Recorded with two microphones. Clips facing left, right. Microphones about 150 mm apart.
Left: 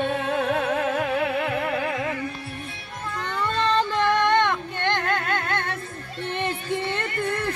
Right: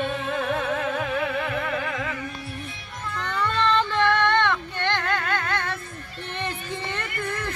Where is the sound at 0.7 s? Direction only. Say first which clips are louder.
Left 2 dB; 40° left (ahead or behind).